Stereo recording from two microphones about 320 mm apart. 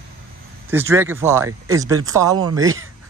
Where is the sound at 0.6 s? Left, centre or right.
Centre.